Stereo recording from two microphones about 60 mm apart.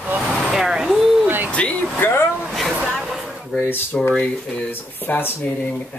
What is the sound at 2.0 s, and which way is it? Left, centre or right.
Speech, left.